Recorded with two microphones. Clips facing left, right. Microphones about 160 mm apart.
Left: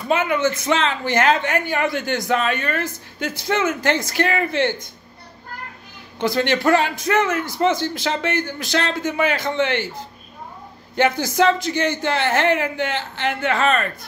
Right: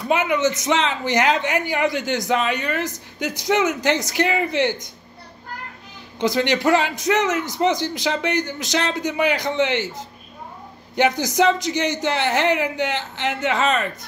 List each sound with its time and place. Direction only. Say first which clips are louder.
0.1 s a man's voice: even; 15° right (ahead or behind)
6.1 s a man's voice: even; 20° right (ahead or behind)